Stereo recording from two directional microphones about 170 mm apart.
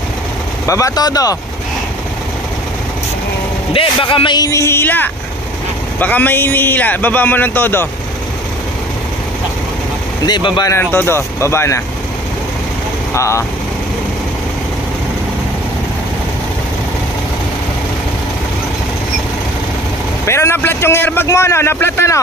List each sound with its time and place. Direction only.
0.7 s speech: 20° left (ahead or behind)
3.7 s a man's voice: 30° left (ahead or behind); by 7.9 s 10° left (ahead or behind)
10.2 s speech: 25° left (ahead or behind)
10.7 s a man's voice: 10° left (ahead or behind)
13.1 s a man's voice: 15° left (ahead or behind)
20.2 s a man's voice: 15° left (ahead or behind)